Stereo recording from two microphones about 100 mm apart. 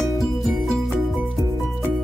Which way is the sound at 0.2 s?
Centre (ahead or behind).